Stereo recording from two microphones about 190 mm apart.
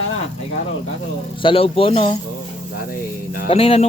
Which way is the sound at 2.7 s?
50° left (ahead or behind).